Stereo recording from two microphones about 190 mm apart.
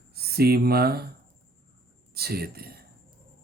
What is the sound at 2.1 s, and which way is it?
Speech, 55° right (ahead or behind).